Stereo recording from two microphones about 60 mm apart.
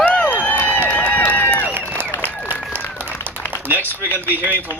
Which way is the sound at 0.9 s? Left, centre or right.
Left.